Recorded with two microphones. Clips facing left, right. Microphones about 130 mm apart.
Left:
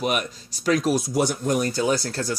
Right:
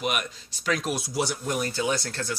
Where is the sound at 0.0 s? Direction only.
40° left (ahead or behind).